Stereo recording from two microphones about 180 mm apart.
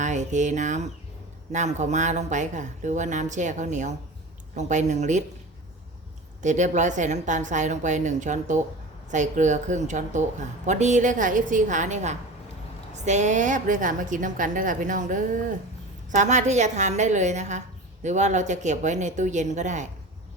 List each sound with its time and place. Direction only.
0.0 s speech: 40° right (ahead or behind)
6.4 s a woman's voice: 40° right (ahead or behind)